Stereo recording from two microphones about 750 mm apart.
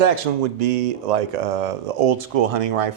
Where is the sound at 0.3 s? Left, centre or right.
Right.